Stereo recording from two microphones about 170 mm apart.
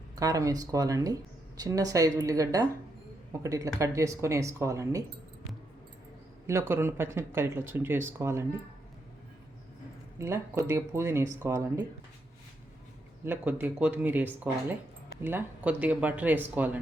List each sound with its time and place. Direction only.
0.2 s speech: 20° right (ahead or behind)
6.5 s speech: 15° right (ahead or behind)
10.2 s speech: 15° right (ahead or behind)
13.2 s speech: 10° right (ahead or behind)